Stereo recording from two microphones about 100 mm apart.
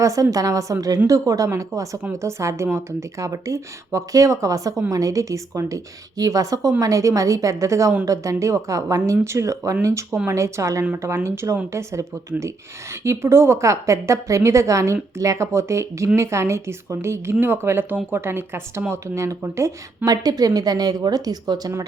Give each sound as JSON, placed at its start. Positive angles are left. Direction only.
{"t": 0.0, "sound": "a woman's voice", "side_deg": -35}